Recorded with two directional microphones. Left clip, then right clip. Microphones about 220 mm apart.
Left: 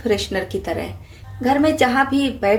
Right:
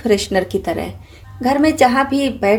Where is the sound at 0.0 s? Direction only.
35° right (ahead or behind).